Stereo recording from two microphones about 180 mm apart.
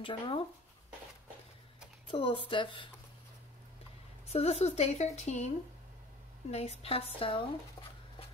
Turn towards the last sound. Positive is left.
turn(degrees=30)  # may be behind; listen again after turning